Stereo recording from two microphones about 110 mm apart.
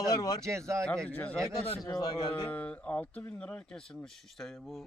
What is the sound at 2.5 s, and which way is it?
Speech, 10° left (ahead or behind).